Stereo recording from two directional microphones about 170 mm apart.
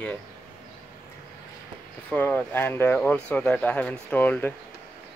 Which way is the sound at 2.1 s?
10° left (ahead or behind).